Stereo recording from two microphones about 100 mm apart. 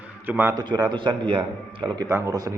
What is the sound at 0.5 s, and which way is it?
Speech, 45° right (ahead or behind).